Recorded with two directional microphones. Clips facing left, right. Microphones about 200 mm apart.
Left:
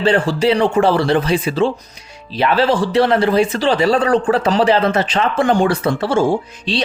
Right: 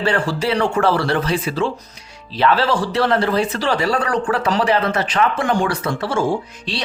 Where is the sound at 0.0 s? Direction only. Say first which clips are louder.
Left 5 dB; 20° left (ahead or behind).